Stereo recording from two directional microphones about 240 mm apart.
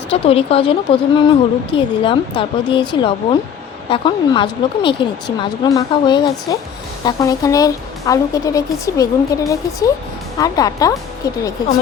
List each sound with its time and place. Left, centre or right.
0.1 s speech: left